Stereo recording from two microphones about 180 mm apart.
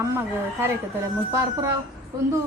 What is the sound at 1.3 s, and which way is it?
Speech, 15° right (ahead or behind).